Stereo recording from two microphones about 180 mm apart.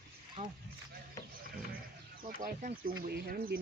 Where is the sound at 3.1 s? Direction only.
65° right (ahead or behind).